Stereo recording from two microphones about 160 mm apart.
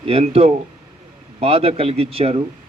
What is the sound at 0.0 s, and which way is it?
A man's voice, 40° right (ahead or behind).